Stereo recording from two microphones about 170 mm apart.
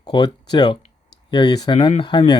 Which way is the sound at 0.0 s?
25° left (ahead or behind).